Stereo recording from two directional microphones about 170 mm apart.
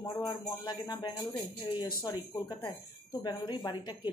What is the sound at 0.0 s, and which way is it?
Speech, 20° left (ahead or behind).